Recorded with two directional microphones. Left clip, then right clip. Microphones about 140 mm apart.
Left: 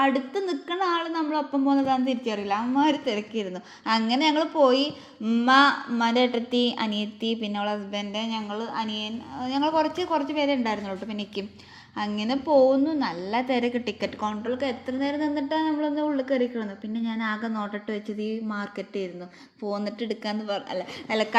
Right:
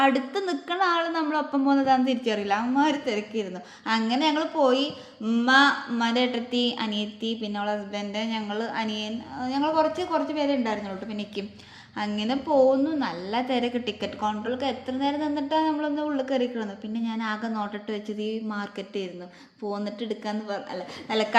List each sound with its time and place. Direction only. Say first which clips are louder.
0.0 s a woman's voice: right 1 dB; 5° right (ahead or behind)
2.8 s a woman's voice: left 1 dB; 20° left (ahead or behind)
8.1 s a woman's voice: right 1 dB; 10° left (ahead or behind)
8.4 s a woman's voice: right 1 dB; 5° right (ahead or behind)
9.4 s a woman's voice: even; 25° left (ahead or behind)
11.9 s a woman's voice: even; 15° left (ahead or behind); by 20.8 s 35° left (ahead or behind)
21.1 s a woman's voice: even; 20° left (ahead or behind)